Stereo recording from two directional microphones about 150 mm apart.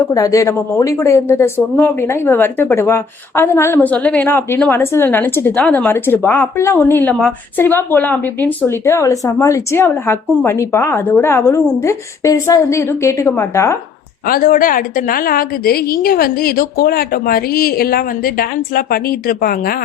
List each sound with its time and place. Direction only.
0.0 s speech: 25° left (ahead or behind)
14.3 s a woman's voice: 70° left (ahead or behind)